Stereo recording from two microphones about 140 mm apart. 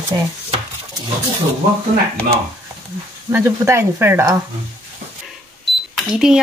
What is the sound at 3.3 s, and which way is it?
Speech, 20° right (ahead or behind).